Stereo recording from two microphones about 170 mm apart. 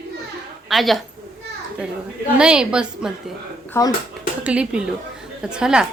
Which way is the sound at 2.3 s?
5° right (ahead or behind).